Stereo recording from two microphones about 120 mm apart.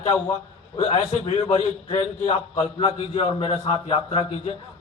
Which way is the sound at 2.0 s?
50° left (ahead or behind).